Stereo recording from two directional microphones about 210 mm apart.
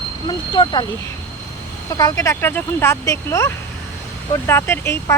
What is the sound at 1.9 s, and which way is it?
Speech, 15° left (ahead or behind).